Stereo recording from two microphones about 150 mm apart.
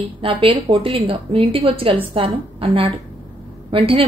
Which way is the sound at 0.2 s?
35° right (ahead or behind).